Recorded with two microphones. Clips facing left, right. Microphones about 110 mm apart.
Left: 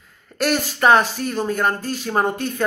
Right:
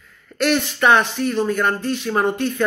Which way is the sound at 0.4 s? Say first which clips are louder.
Right 1 dB; 35° left (ahead or behind).